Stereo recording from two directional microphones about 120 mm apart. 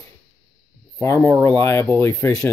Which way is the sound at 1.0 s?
20° left (ahead or behind).